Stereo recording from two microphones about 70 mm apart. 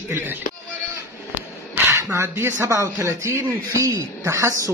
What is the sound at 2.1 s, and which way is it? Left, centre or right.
A man's voice, right.